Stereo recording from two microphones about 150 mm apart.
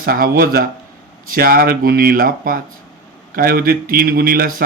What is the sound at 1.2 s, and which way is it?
Speech, 70° right (ahead or behind).